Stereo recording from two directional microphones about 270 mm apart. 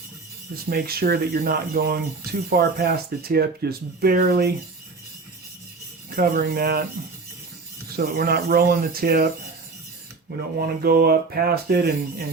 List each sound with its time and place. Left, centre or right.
0.5 s speech: right
6.1 s speech: right
7.9 s speech: right
10.6 s speech: right